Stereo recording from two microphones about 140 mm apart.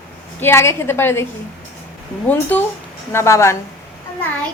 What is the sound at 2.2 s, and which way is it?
A woman's voice, 15° left (ahead or behind).